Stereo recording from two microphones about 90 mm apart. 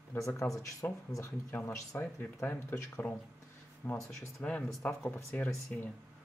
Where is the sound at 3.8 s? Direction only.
20° left (ahead or behind).